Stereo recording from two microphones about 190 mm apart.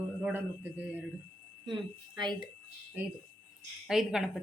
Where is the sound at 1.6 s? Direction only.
25° right (ahead or behind).